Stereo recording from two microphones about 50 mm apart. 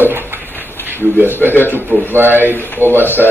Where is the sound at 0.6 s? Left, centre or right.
Left.